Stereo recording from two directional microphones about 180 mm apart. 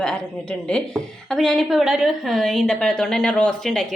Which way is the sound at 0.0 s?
5° left (ahead or behind).